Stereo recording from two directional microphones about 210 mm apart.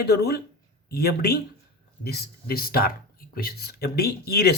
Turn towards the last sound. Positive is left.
turn(degrees=50)  # may be behind; listen again after turning